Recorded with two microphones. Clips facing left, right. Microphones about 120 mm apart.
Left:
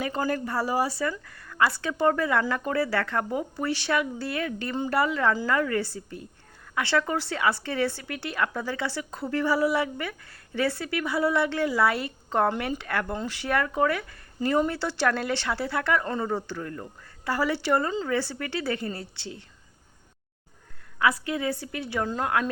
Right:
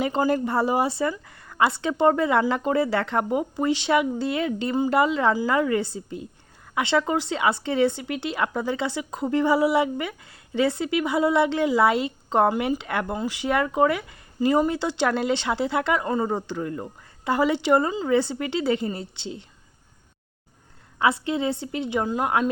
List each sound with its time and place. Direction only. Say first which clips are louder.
0.0 s speech: right 5 dB; 20° right (ahead or behind)
21.0 s speech: right 3 dB; 25° right (ahead or behind)